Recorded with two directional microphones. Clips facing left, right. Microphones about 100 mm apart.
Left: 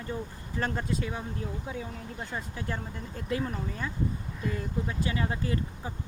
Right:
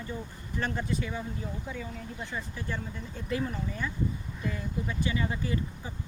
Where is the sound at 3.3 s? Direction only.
40° left (ahead or behind).